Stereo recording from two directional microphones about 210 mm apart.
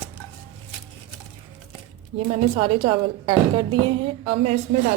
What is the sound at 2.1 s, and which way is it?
A woman's voice, 25° right (ahead or behind).